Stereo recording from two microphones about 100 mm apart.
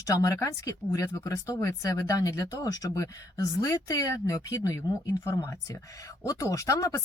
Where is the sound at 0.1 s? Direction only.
35° left (ahead or behind).